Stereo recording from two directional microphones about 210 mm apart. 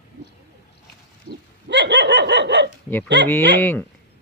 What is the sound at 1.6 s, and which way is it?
Dog, 55° right (ahead or behind).